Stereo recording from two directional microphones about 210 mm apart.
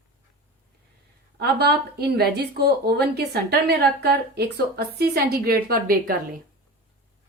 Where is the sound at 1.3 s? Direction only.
50° right (ahead or behind).